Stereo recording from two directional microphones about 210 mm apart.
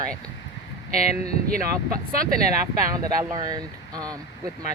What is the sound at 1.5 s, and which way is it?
Speech, 45° right (ahead or behind).